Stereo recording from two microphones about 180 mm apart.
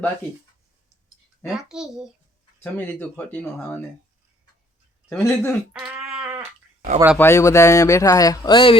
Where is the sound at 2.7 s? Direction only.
10° left (ahead or behind).